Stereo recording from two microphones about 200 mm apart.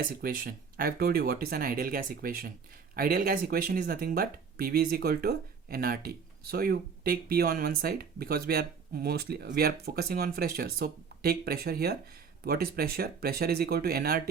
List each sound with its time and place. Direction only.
0.0 s speech: 45° right (ahead or behind)